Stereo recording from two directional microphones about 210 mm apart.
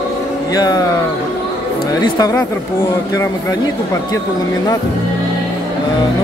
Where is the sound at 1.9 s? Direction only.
20° left (ahead or behind).